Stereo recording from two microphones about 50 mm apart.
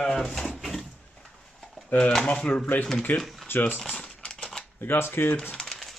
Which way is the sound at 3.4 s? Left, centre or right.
Left.